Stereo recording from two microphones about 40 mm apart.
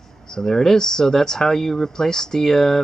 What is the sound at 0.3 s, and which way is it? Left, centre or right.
Speech, centre.